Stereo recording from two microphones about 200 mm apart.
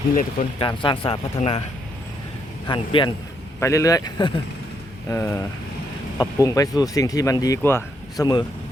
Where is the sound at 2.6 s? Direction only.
25° left (ahead or behind).